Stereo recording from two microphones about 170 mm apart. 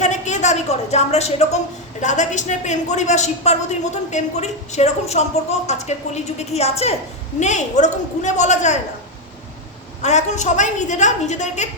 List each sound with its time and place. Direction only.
0.0 s a woman's voice: 45° left (ahead or behind)
10.0 s a woman's voice: 45° left (ahead or behind)